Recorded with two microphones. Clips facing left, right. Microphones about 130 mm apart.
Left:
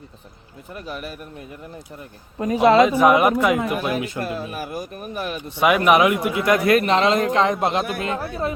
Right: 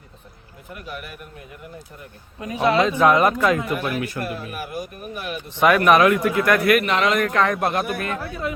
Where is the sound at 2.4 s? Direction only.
40° left (ahead or behind).